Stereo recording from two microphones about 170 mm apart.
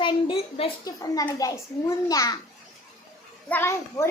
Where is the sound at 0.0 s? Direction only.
30° left (ahead or behind).